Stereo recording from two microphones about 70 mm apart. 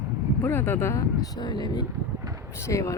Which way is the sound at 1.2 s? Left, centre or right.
Left.